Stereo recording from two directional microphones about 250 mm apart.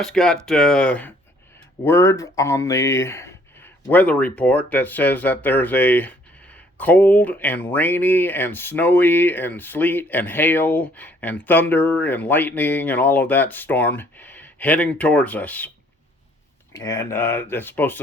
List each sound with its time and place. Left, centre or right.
0.0 s speech: centre
16.7 s speech: centre